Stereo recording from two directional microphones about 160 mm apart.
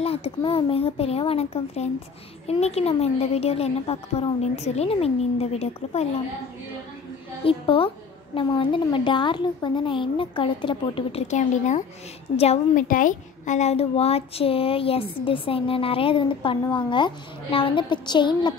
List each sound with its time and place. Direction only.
0.0 s a child's voice: 35° left (ahead or behind)
7.4 s a child's voice: 35° left (ahead or behind)